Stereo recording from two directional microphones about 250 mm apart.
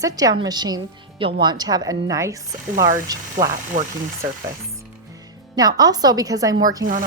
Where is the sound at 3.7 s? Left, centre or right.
Right.